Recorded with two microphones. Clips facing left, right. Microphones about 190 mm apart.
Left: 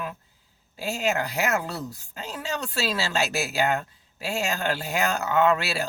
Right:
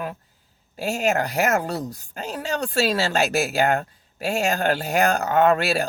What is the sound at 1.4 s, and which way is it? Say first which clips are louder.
Speech: right 5 dB; 45° right (ahead or behind).